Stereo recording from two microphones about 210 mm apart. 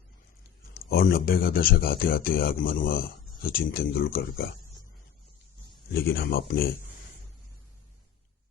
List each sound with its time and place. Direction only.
0.7 s speech: 45° left (ahead or behind)
5.9 s speech: 50° left (ahead or behind)